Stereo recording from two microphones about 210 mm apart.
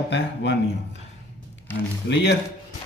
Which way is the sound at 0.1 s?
55° left (ahead or behind).